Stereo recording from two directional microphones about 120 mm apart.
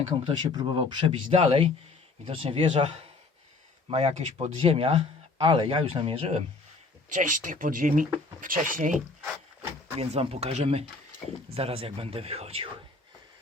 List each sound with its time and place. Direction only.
0.3 s speech: 40° right (ahead or behind)
1.3 s speech: 55° right (ahead or behind)
3.8 s speech: 65° right (ahead or behind)
4.5 s speech: 50° right (ahead or behind)
7.1 s speech: 90° right
10.0 s speech: 55° right (ahead or behind)